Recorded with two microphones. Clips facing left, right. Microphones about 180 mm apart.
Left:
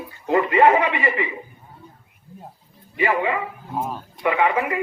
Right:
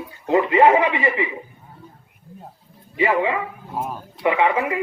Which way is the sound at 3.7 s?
5° right (ahead or behind).